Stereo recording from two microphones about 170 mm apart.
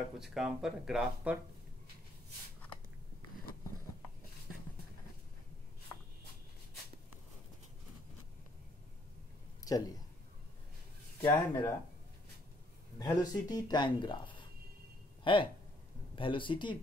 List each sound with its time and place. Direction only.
0.2 s speech: 5° right (ahead or behind)
9.7 s speech: 20° left (ahead or behind)
11.1 s speech: 30° left (ahead or behind)
13.0 s speech: 25° left (ahead or behind)